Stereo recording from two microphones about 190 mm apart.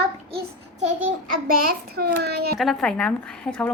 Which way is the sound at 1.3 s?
50° right (ahead or behind).